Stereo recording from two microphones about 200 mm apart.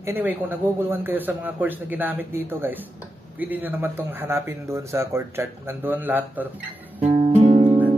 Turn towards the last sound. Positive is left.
turn(degrees=-35)  # may be behind; listen again after turning